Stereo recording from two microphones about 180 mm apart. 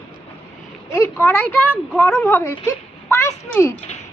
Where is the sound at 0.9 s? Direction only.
15° left (ahead or behind).